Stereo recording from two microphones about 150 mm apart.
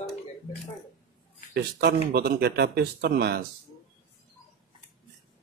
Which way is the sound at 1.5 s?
90° right.